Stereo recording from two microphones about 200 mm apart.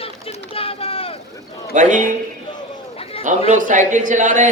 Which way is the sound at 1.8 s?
40° right (ahead or behind).